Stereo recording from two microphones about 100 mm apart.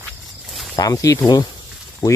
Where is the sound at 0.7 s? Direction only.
35° left (ahead or behind).